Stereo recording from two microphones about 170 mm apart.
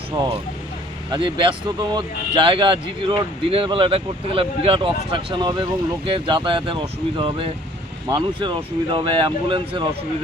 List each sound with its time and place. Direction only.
1.1 s speech: 30° right (ahead or behind)